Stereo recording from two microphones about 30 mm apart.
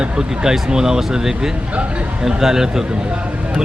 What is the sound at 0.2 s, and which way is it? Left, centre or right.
A man's voice, right.